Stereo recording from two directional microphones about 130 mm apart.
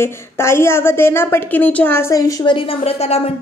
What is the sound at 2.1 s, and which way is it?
Speech, 35° left (ahead or behind).